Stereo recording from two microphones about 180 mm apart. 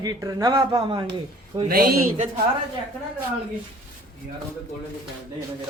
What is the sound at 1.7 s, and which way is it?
Speech, 55° right (ahead or behind).